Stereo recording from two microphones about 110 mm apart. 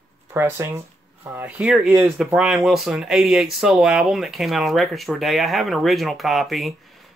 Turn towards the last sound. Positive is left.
turn(degrees=0)  # may be behind; listen again after turning